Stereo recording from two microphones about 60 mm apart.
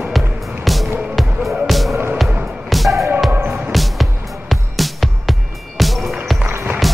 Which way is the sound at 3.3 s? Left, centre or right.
Right.